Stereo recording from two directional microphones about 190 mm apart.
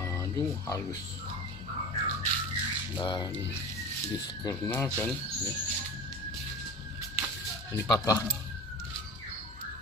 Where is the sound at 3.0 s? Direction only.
25° left (ahead or behind).